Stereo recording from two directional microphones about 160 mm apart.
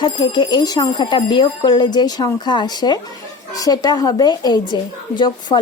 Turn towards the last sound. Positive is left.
turn(degrees=30)  # may be behind; listen again after turning